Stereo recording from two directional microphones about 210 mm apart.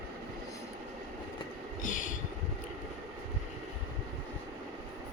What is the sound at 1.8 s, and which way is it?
Vehicle, 40° left (ahead or behind).